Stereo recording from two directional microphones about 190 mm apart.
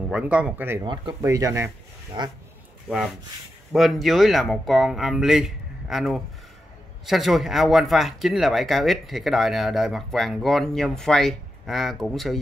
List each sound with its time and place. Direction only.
0.1 s speech: 5° right (ahead or behind); by 2.3 s 25° right (ahead or behind)
2.9 s speech: centre (ahead or behind)